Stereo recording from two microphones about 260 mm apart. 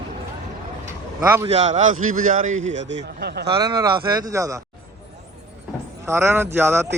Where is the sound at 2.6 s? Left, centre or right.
Right.